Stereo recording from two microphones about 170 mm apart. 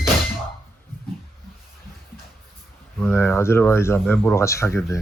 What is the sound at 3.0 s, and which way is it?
Speech, 15° left (ahead or behind).